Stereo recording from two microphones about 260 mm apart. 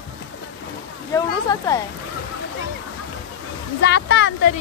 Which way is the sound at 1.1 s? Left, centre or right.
Centre.